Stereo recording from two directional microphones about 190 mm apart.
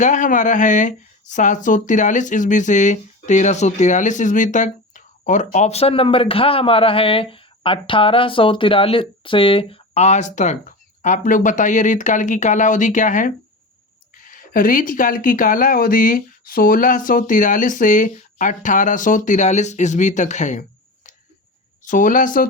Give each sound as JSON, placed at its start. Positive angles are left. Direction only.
{"t": 0.0, "sound": "speech", "side_deg": 40}
{"t": 21.8, "sound": "speech", "side_deg": 45}